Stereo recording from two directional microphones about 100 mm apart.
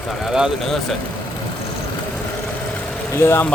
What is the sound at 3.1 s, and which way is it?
Speech, 25° left (ahead or behind).